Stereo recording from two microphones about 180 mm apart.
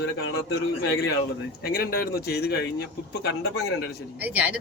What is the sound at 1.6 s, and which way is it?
A man's voice, 55° left (ahead or behind).